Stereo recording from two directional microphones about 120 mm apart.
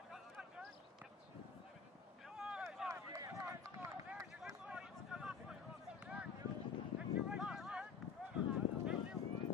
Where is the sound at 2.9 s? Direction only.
25° right (ahead or behind).